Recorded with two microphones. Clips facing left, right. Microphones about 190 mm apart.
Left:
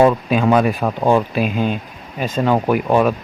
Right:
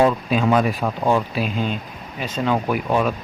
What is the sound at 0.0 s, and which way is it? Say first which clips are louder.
Speech: left 4 dB; 55° left (ahead or behind).